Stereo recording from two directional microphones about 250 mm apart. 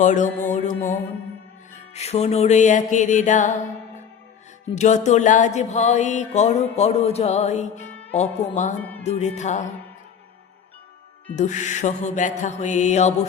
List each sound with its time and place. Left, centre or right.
0.0 s music: left
1.9 s music: left
4.7 s music: left
8.8 s music: centre
9.0 s music: left
11.3 s music: left